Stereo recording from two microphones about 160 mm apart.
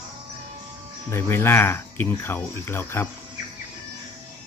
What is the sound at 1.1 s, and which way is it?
Speech, 15° left (ahead or behind).